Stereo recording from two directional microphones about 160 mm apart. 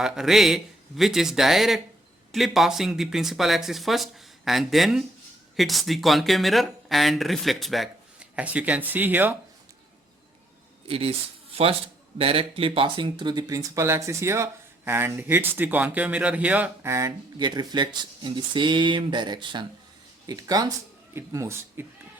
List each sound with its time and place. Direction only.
0.0 s speech: centre (ahead or behind)
10.8 s speech: 35° right (ahead or behind)
12.1 s speech: 35° right (ahead or behind); by 21.8 s 15° right (ahead or behind)